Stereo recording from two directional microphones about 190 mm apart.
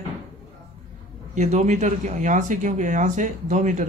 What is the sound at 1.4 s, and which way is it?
Speech, 40° right (ahead or behind).